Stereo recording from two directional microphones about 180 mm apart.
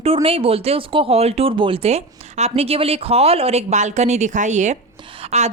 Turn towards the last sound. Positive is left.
turn(degrees=-35)  # may be behind; listen again after turning